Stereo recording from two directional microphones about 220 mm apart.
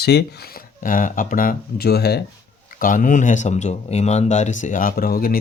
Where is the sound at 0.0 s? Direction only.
45° left (ahead or behind).